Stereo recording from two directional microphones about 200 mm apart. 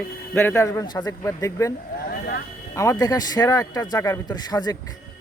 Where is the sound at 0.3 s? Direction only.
10° left (ahead or behind).